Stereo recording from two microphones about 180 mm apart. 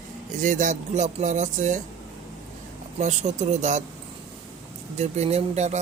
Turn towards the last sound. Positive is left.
turn(degrees=-40)  # may be behind; listen again after turning